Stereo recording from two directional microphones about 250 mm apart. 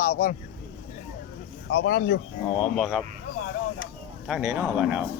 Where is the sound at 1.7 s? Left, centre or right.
Left.